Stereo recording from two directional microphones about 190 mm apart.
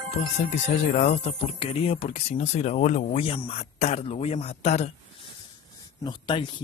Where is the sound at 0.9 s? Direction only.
35° left (ahead or behind).